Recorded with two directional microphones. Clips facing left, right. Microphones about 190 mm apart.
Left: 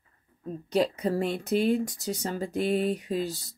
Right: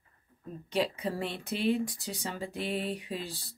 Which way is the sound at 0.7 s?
40° left (ahead or behind).